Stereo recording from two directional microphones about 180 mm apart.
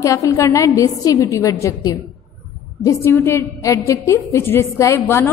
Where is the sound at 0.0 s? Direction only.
20° left (ahead or behind).